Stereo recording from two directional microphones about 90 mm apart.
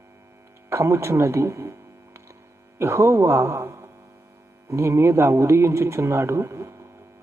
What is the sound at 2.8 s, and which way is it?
A man's voice, 30° right (ahead or behind).